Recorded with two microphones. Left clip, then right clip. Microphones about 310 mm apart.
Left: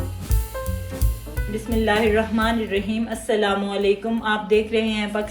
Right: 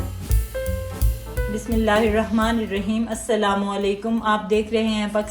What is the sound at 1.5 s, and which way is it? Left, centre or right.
A woman's voice, right.